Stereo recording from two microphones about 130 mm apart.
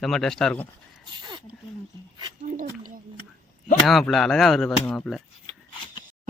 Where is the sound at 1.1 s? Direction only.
35° right (ahead or behind).